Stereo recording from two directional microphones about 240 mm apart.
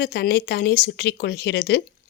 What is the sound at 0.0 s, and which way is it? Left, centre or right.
A woman's voice, left.